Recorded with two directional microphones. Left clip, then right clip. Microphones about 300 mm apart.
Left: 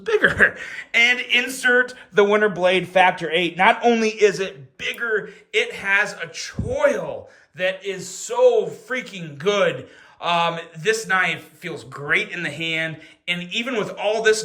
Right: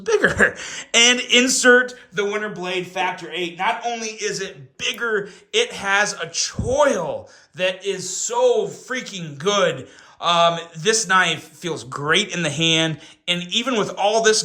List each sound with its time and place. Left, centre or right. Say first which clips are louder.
0.0 s speech: even; centre
2.1 s a man's voice: left 7 dB; centre
4.8 s a man's voice: right 1 dB; centre